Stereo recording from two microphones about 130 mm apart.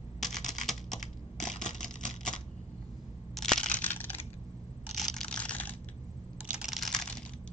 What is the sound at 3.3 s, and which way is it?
Crushing, 5° left (ahead or behind).